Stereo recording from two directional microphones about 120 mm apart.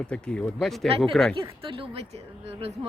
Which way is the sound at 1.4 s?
45° right (ahead or behind).